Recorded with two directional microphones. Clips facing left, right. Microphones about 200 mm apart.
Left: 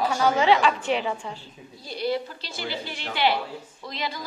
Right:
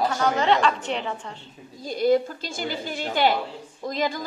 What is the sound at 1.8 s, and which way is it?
A woman's voice, 45° right (ahead or behind).